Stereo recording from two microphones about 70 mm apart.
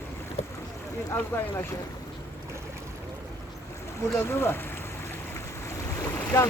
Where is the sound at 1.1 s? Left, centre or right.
Left.